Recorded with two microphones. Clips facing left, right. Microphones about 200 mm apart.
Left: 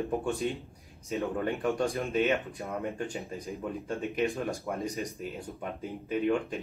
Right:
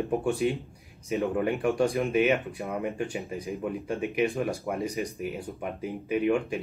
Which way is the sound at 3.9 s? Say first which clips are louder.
Right 3 dB; 15° right (ahead or behind).